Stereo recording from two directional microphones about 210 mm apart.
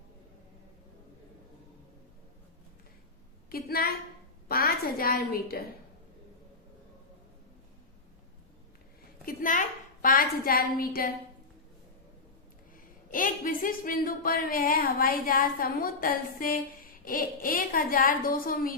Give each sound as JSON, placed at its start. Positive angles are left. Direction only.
{"t": 3.5, "sound": "a woman's voice", "side_deg": 45}
{"t": 9.2, "sound": "a sound", "side_deg": 40}
{"t": 12.7, "sound": "speech", "side_deg": 40}